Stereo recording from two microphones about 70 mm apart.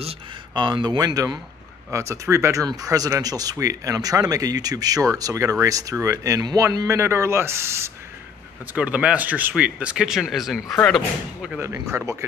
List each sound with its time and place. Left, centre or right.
0.6 s speech: right
1.9 s speech: right
2.6 s speech: right
8.7 s speech: centre
11.6 s speech: right